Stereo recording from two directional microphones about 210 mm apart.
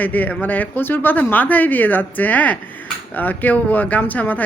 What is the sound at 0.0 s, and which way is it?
Speech, 10° left (ahead or behind).